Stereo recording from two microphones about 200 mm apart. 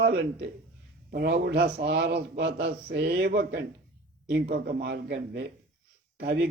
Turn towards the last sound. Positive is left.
turn(degrees=-55)  # may be behind; listen again after turning